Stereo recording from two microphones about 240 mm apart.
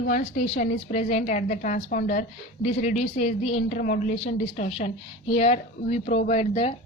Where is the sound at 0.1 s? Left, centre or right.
Left.